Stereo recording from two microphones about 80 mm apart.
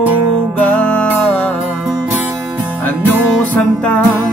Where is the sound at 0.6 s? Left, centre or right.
Centre.